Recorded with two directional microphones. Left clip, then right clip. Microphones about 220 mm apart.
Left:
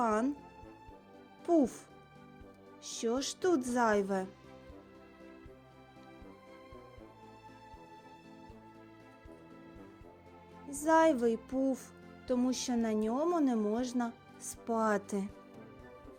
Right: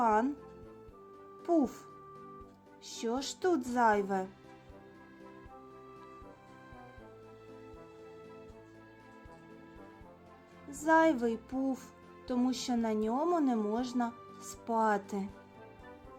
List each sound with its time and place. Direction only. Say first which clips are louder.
0.0 s music: right 3 dB; 25° left (ahead or behind)
1.5 s speech: left 1 dB; 20° left (ahead or behind)
2.8 s a woman's voice: left 2 dB; 20° left (ahead or behind)
10.8 s a woman's voice: even; 25° left (ahead or behind)